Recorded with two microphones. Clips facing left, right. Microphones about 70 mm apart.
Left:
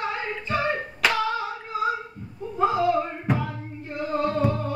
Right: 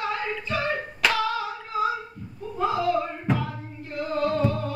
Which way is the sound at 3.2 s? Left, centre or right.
Centre.